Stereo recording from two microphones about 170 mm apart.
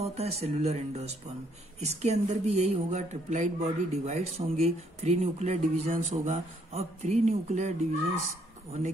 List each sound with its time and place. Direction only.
0.0 s speech: 40° right (ahead or behind)